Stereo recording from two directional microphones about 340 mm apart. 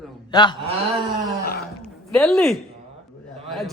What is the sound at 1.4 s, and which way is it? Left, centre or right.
Groan, left.